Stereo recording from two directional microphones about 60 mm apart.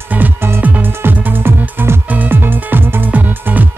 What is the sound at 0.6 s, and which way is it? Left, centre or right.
Music, right.